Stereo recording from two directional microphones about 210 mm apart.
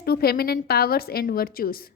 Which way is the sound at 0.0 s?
50° left (ahead or behind).